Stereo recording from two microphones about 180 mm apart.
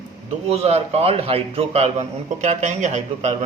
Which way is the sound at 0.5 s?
35° right (ahead or behind).